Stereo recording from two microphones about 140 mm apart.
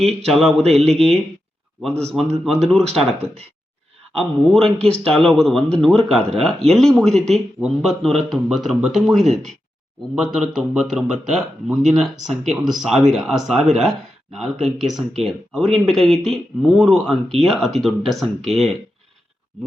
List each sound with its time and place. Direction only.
0.3 s speech: centre (ahead or behind)
0.6 s speech: 50° right (ahead or behind)
0.9 s speech: 5° left (ahead or behind)
1.9 s speech: 50° right (ahead or behind)
2.9 s speech: centre (ahead or behind)
4.2 s speech: 5° left (ahead or behind)